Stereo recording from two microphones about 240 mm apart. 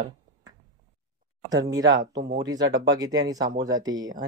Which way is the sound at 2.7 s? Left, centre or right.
Centre.